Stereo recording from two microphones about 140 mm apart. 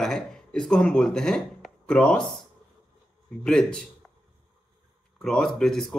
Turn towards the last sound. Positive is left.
turn(degrees=5)  # may be behind; listen again after turning